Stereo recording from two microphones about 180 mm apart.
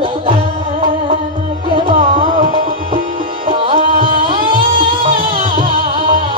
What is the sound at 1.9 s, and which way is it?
Tabla, 50° right (ahead or behind).